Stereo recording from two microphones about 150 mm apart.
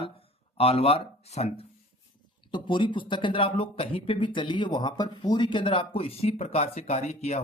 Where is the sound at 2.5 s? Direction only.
30° left (ahead or behind).